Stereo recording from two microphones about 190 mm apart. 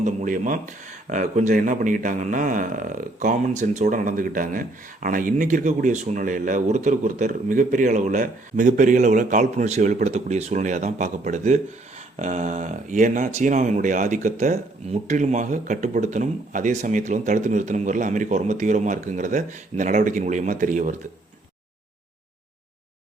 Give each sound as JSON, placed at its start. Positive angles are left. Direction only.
{"t": 0.0, "sound": "a man's voice", "side_deg": -40}